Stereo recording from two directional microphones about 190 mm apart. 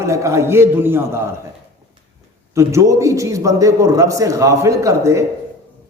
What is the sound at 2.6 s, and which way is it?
A man's voice, 15° right (ahead or behind).